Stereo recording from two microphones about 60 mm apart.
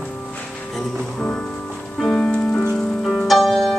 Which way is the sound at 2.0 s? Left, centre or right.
Centre.